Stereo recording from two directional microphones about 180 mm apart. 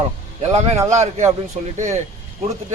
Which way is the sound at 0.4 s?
35° right (ahead or behind).